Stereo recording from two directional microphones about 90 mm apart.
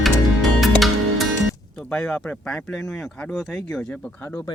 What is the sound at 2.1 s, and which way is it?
Speech, 15° left (ahead or behind).